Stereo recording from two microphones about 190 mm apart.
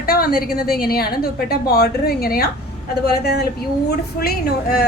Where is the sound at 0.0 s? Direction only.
50° left (ahead or behind).